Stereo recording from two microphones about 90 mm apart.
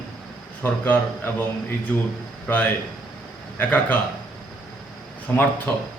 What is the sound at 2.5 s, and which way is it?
A man's voice, 25° left (ahead or behind).